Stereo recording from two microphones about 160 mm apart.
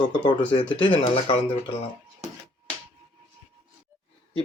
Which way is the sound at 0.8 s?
35° left (ahead or behind).